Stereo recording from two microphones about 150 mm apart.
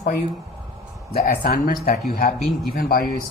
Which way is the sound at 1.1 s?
90° left.